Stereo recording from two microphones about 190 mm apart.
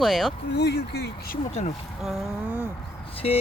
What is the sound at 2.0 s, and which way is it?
Speech, 5° right (ahead or behind).